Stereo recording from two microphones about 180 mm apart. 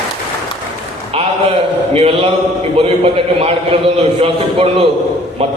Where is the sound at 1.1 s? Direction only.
30° right (ahead or behind).